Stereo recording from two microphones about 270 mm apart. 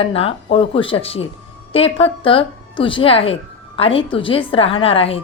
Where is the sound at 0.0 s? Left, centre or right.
Left.